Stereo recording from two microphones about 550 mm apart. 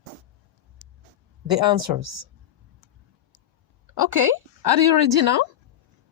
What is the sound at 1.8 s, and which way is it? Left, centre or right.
Speech, right.